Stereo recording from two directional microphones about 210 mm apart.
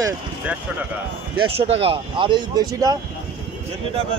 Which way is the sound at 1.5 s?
30° right (ahead or behind).